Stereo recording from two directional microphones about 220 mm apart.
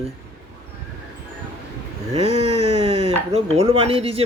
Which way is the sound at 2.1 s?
25° right (ahead or behind).